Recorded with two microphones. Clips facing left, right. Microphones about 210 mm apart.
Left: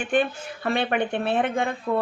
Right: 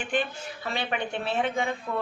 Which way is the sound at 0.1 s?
55° left (ahead or behind).